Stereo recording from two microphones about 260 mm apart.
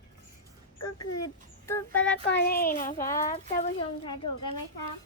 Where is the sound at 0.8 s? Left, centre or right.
Left.